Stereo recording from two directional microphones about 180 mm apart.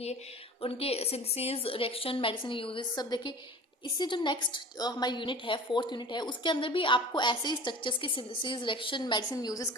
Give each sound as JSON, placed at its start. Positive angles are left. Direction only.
{"t": 0.6, "sound": "a woman's voice", "side_deg": 35}